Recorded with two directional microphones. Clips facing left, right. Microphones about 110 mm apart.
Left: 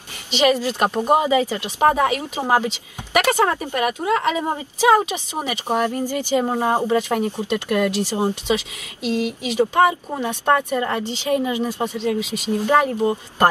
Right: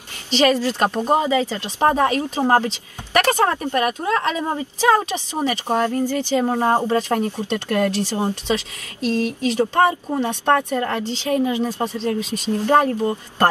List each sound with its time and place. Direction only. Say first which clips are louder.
0.3 s speech: right 1 dB; 15° left (ahead or behind)
3.7 s speech: right 1 dB; 40° right (ahead or behind)
4.4 s speech: left 1 dB; 15° left (ahead or behind)